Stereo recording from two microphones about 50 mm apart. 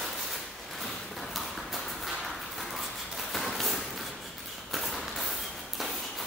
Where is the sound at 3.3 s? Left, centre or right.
Centre.